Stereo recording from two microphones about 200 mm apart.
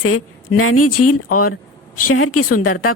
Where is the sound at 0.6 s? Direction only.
90° left.